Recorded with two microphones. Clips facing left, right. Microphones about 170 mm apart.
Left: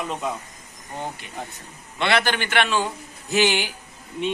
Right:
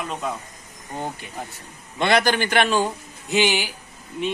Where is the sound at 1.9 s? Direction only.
45° right (ahead or behind).